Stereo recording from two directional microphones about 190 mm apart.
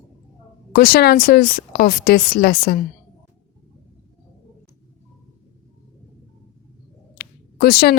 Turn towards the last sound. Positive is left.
turn(degrees=55)  # may be behind; listen again after turning